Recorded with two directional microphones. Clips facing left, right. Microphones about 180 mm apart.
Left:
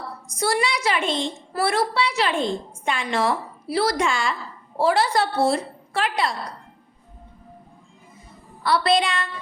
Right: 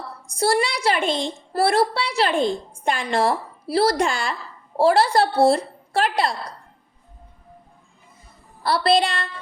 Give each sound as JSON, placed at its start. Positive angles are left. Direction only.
{"t": 0.3, "sound": "a woman's voice", "side_deg": -30}
{"t": 8.6, "sound": "a woman's voice", "side_deg": -35}